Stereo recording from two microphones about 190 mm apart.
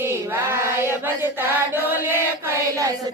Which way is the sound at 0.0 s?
10° right (ahead or behind).